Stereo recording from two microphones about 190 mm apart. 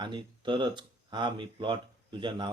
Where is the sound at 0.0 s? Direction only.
25° right (ahead or behind).